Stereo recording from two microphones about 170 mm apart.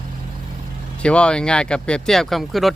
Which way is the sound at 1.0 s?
5° left (ahead or behind).